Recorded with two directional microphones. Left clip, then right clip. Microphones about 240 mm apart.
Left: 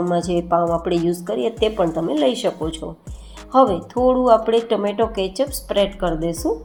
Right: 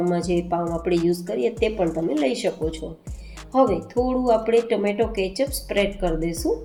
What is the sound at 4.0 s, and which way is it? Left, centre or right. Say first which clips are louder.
Speech: left 7 dB; left.